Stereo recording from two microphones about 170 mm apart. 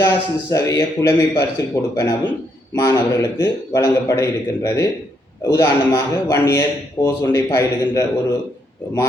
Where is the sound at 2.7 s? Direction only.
20° left (ahead or behind).